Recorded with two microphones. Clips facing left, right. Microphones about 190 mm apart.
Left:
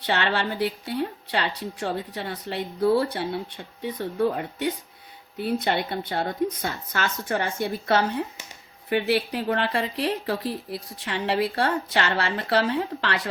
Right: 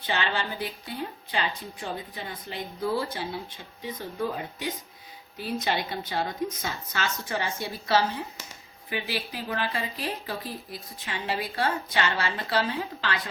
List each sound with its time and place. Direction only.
0.0 s a woman's voice: 70° left (ahead or behind)